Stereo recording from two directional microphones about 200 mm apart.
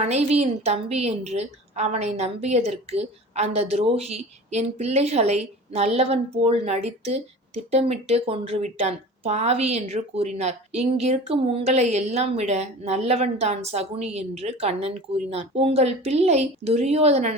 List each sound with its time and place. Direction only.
0.0 s a woman's voice: 30° right (ahead or behind)